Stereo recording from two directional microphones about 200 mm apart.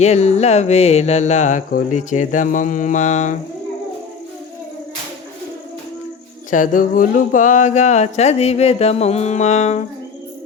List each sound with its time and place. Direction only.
0.0 s speech: 35° left (ahead or behind)
6.5 s speech: 40° left (ahead or behind)